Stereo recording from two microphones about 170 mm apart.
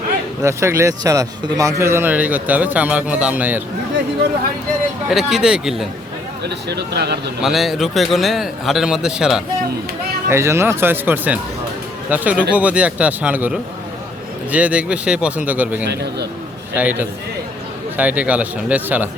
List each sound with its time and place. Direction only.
0.4 s a man's voice: 15° right (ahead or behind)
5.0 s a man's voice: 5° right (ahead or behind)
6.4 s speech: 80° right
7.4 s a man's voice: centre (ahead or behind)
10.2 s a man's voice: 15° right (ahead or behind)